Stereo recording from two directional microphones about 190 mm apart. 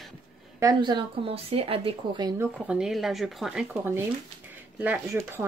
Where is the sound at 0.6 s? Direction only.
20° right (ahead or behind).